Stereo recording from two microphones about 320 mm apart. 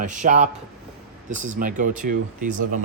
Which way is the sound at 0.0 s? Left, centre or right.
Right.